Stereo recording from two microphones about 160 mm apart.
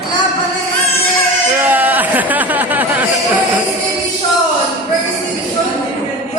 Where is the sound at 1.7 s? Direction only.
10° right (ahead or behind).